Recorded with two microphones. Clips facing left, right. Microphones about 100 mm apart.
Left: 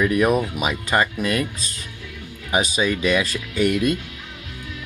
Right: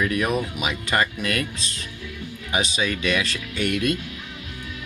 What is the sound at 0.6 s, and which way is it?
Speech, 40° left (ahead or behind).